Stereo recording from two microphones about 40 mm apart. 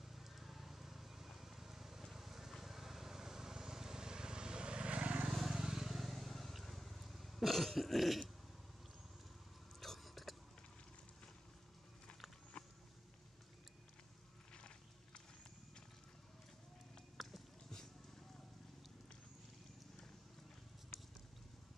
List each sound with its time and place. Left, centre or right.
0.0 s vehicle: centre; by 5.3 s right
5.3 s vehicle: centre
9.8 s hiccup: centre
12.6 s walk: left
17.2 s a sound: centre